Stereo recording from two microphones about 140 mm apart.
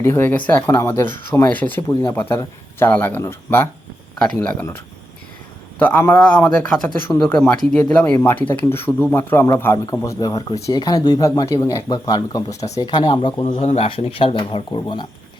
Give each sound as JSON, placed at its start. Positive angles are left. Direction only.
{"t": 0.0, "sound": "speech", "side_deg": 15}
{"t": 4.2, "sound": "speech", "side_deg": 5}
{"t": 5.8, "sound": "speech", "side_deg": 15}
{"t": 12.5, "sound": "speech", "side_deg": 50}
{"t": 12.8, "sound": "speech", "side_deg": 35}
{"t": 13.4, "sound": "speech", "side_deg": 45}